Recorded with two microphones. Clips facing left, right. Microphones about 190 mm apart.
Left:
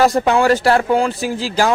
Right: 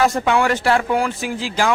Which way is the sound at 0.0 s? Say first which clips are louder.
Left 3 dB; 35° left (ahead or behind).